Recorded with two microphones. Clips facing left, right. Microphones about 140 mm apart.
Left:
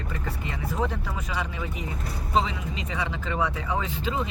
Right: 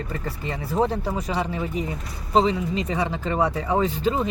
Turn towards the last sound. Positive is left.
turn(degrees=-40)  # may be behind; listen again after turning